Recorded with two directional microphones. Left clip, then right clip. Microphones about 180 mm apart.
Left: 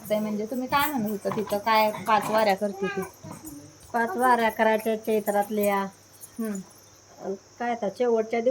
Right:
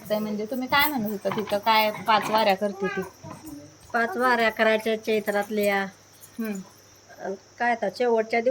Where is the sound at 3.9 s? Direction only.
25° left (ahead or behind).